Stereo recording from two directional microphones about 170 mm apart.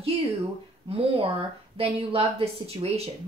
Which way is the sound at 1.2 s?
35° right (ahead or behind).